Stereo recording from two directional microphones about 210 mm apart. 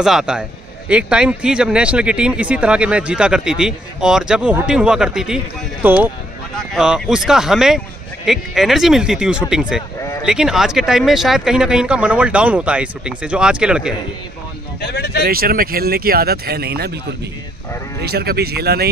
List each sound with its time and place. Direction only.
0.0 s a man's voice: 5° right (ahead or behind)
14.8 s speech: 50° left (ahead or behind)
15.2 s speech: 45° right (ahead or behind)
18.0 s speech: 50° right (ahead or behind)